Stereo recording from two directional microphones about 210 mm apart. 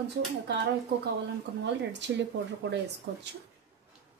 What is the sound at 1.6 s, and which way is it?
Speech, 55° right (ahead or behind).